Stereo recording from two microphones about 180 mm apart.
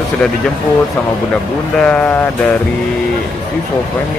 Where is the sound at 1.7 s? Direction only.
5° left (ahead or behind).